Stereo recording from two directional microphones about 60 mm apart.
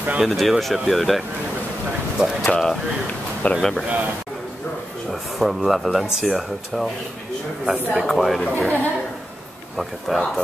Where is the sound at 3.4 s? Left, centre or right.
Left.